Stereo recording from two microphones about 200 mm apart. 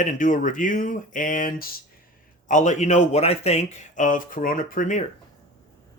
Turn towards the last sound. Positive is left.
turn(degrees=40)  # may be behind; listen again after turning